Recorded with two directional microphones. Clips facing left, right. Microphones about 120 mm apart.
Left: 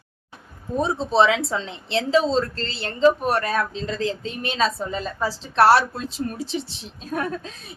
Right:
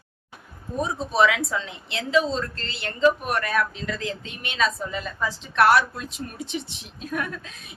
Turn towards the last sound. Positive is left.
turn(degrees=30)  # may be behind; listen again after turning